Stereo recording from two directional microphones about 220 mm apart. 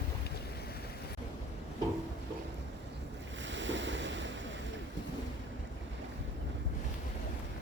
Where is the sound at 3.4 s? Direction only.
55° right (ahead or behind).